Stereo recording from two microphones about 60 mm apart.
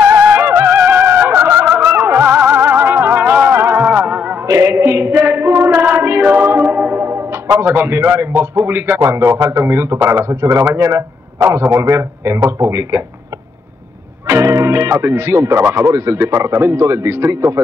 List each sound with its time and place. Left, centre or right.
0.0 s music: right
0.7 s a sound: right
1.0 s fowl: right
2.2 s music: right
3.3 s music: right
3.5 s music: right
3.8 s music: right
4.5 s a sound: right
5.5 s music: right
7.0 s music: right
7.6 s a man's voice: right
9.0 s a man's voice: right
14.2 s speech: right